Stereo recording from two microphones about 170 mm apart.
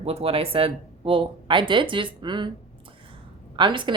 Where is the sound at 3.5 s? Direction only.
30° right (ahead or behind).